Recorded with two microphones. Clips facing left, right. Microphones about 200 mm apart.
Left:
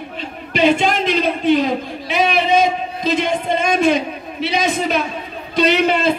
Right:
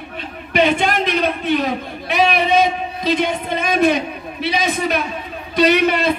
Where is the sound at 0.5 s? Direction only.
55° right (ahead or behind).